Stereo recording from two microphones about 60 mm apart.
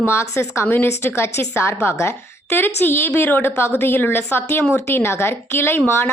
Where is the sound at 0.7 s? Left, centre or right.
Left.